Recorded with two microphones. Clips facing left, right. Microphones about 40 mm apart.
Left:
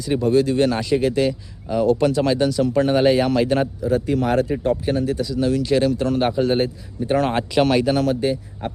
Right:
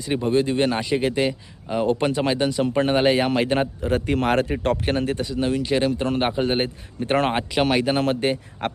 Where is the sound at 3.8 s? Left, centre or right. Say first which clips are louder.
Left 2 dB; right.